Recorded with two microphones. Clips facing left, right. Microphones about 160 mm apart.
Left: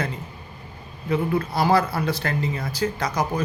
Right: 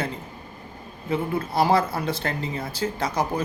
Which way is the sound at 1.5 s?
25° right (ahead or behind).